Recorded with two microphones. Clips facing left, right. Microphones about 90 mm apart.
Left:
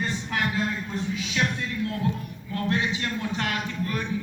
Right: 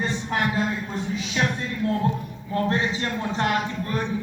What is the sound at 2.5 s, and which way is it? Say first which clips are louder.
Speech: right 3 dB; 30° right (ahead or behind).